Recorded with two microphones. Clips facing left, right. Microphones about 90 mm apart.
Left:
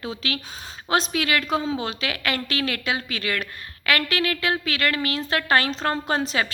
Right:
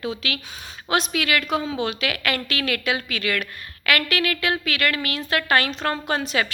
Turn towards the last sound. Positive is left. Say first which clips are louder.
# even
turn(degrees=30)  # may be behind; listen again after turning